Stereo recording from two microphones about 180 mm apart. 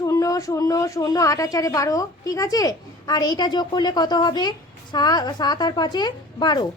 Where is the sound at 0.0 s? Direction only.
20° left (ahead or behind).